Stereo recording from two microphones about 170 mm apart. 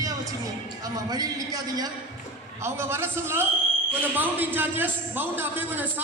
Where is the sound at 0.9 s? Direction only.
20° right (ahead or behind).